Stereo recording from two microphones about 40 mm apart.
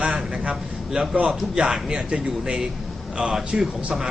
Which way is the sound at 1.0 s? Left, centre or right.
Right.